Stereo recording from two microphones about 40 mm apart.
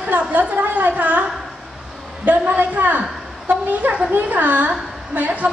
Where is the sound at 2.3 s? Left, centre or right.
Right.